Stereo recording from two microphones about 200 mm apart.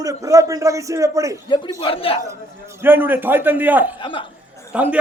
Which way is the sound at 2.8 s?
10° right (ahead or behind).